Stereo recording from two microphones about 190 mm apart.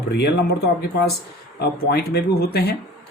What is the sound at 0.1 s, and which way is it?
Speech, 60° left (ahead or behind).